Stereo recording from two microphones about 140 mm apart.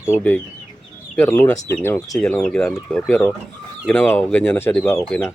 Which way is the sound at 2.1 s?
5° left (ahead or behind).